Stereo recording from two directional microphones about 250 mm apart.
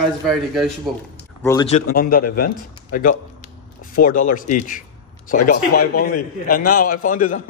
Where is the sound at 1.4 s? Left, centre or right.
Centre.